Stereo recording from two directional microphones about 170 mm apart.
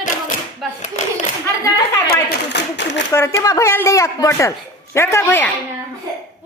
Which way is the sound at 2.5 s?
90° left.